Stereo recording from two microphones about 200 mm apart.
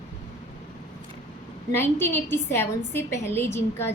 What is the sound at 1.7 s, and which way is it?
A woman's voice, 10° left (ahead or behind).